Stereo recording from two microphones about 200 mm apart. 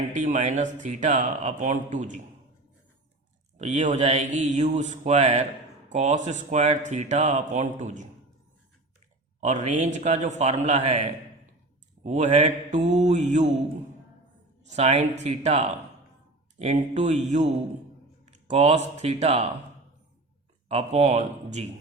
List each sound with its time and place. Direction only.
0.2 s speech: 35° right (ahead or behind)
3.6 s speech: 35° right (ahead or behind)
9.4 s speech: 35° right (ahead or behind)
12.0 s speech: 35° right (ahead or behind)
14.7 s speech: 35° right (ahead or behind)
18.4 s speech: 35° right (ahead or behind)
20.7 s speech: 30° right (ahead or behind)